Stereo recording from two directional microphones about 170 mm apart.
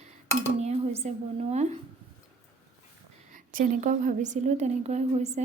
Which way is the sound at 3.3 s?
50° right (ahead or behind).